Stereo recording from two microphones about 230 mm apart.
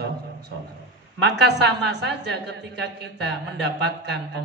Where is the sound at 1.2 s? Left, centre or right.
Right.